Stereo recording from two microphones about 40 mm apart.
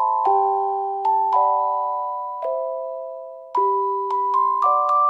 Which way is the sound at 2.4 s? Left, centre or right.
Centre.